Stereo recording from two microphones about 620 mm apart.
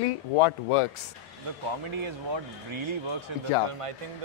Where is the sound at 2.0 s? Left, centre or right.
Right.